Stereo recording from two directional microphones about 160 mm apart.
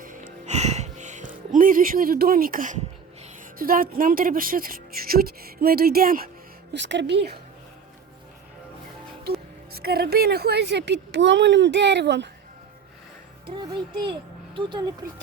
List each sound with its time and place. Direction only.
0.4 s music: 45° right (ahead or behind)
3.6 s speech: 60° right (ahead or behind)
6.7 s speech: 90° right
9.8 s speech: 75° right (ahead or behind); by 12.3 s 90° right
13.5 s a child's voice: 30° right (ahead or behind)